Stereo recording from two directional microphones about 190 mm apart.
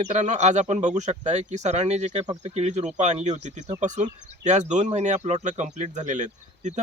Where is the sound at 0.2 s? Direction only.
40° right (ahead or behind).